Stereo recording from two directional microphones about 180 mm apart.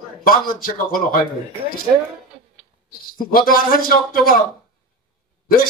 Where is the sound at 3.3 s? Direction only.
55° left (ahead or behind).